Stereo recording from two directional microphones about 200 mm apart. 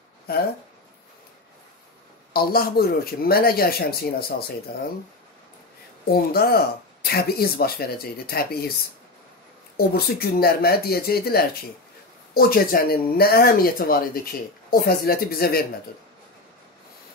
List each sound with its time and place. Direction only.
0.3 s speech: 50° left (ahead or behind)
2.3 s speech: 50° left (ahead or behind)
6.3 s speech: 50° left (ahead or behind)
9.8 s speech: 50° left (ahead or behind)